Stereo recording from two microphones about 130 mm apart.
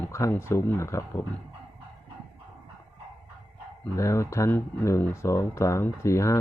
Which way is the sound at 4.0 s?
20° left (ahead or behind).